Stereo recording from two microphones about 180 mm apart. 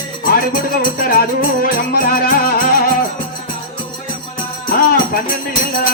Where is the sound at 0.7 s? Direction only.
55° left (ahead or behind).